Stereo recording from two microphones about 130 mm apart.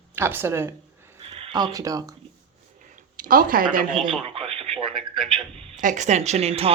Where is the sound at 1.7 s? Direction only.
25° right (ahead or behind).